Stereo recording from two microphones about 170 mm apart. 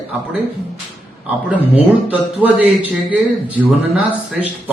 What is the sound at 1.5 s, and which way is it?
Speech, 10° right (ahead or behind).